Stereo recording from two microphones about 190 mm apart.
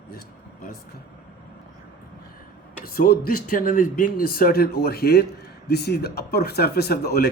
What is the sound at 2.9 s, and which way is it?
Speech, 50° left (ahead or behind).